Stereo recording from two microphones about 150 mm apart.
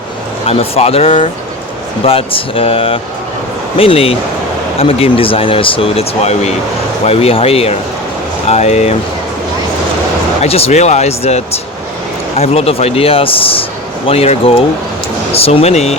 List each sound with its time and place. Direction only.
0.4 s speech: 40° left (ahead or behind)
10.4 s speech: 40° left (ahead or behind)